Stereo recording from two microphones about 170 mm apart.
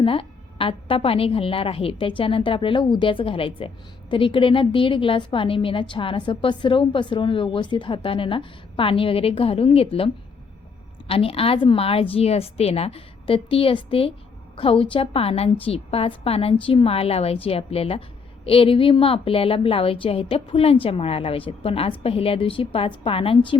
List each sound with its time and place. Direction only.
0.0 s a woman's voice: 30° left (ahead or behind)
11.1 s a woman's voice: 35° left (ahead or behind)